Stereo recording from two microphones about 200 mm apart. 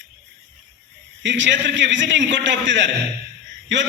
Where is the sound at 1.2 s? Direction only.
65° right (ahead or behind).